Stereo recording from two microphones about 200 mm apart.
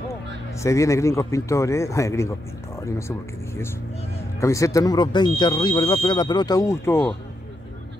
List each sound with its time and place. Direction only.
0.6 s speech: 15° left (ahead or behind)